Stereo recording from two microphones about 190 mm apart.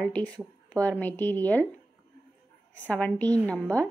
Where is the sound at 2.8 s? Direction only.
10° left (ahead or behind).